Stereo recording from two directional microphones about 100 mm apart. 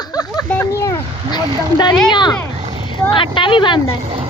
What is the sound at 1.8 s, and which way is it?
Speech, 50° left (ahead or behind).